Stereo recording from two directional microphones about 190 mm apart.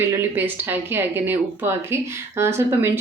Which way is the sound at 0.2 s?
10° right (ahead or behind).